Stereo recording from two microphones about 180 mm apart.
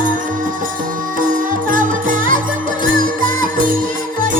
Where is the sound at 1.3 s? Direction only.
50° right (ahead or behind).